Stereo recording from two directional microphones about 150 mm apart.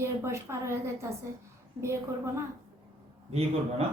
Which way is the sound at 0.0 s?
20° right (ahead or behind).